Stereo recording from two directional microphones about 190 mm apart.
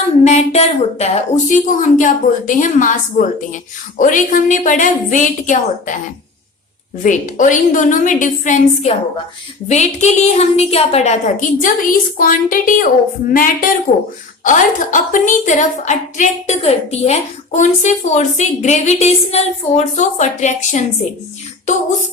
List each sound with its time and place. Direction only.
0.3 s a woman's voice: 35° left (ahead or behind)
7.0 s a woman's voice: 40° left (ahead or behind)